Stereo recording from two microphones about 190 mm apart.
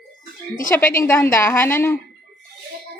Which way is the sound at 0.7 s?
15° left (ahead or behind).